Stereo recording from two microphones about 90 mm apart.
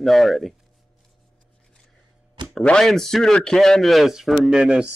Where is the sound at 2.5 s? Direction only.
5° left (ahead or behind).